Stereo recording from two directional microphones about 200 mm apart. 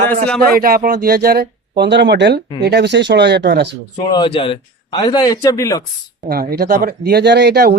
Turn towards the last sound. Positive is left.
turn(degrees=-55)  # may be behind; listen again after turning